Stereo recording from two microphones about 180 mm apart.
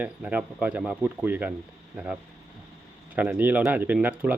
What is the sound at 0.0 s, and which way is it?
Speech, 10° right (ahead or behind).